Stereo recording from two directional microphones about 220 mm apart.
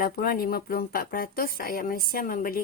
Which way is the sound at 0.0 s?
40° left (ahead or behind).